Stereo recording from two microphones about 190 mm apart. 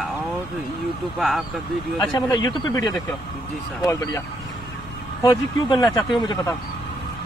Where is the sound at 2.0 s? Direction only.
20° left (ahead or behind).